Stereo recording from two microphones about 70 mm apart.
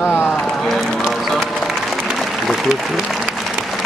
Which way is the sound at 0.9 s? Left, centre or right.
Centre.